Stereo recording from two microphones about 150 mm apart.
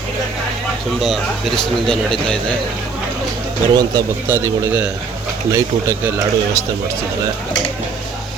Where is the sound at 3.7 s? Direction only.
25° right (ahead or behind).